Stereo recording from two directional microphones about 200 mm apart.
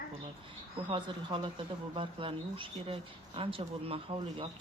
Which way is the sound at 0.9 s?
25° right (ahead or behind).